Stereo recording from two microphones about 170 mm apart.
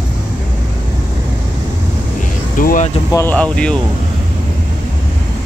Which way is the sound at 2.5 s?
55° left (ahead or behind).